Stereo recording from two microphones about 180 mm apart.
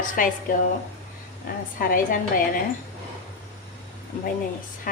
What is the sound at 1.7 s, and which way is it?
Speech, 50° left (ahead or behind).